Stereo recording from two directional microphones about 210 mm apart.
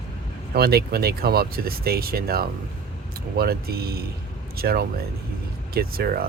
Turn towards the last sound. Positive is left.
turn(degrees=-45)  # may be behind; listen again after turning